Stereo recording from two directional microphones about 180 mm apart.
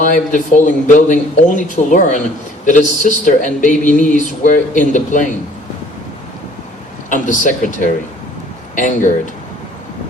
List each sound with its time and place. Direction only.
0.0 s speech: 45° left (ahead or behind)
7.1 s a man's voice: 45° left (ahead or behind)